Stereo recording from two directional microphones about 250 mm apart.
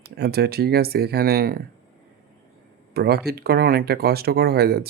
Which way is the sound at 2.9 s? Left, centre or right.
Right.